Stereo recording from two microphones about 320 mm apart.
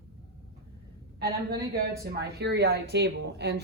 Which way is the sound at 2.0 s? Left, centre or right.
Right.